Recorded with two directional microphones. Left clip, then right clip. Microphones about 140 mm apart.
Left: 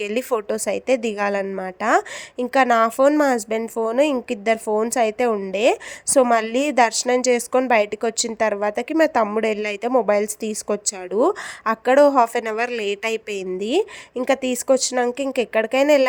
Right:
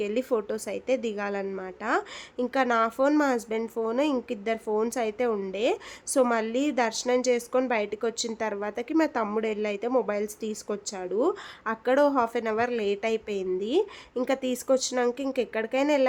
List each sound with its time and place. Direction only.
0.0 s a woman's voice: 35° left (ahead or behind)
2.4 s a woman's voice: 30° left (ahead or behind)